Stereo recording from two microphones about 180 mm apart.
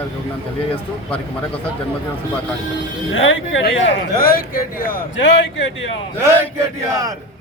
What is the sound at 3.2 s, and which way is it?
Speech, 90° left.